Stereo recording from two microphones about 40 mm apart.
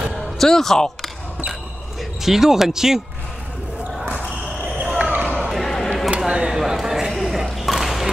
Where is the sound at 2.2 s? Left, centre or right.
Centre.